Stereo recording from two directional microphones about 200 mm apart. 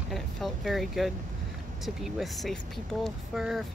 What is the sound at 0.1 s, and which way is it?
Speech, centre (ahead or behind).